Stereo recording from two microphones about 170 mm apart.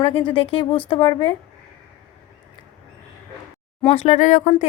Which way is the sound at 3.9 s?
40° left (ahead or behind).